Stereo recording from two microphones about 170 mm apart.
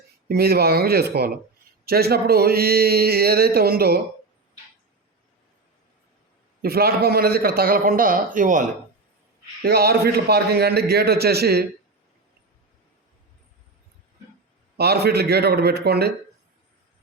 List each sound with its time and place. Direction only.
0.3 s a man's voice: 65° right (ahead or behind)
6.6 s speech: 65° right (ahead or behind)
9.6 s a man's voice: 65° right (ahead or behind)
14.8 s a man's voice: 70° right (ahead or behind)